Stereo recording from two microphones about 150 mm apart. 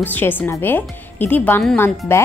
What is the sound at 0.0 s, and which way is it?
Speech, 10° left (ahead or behind).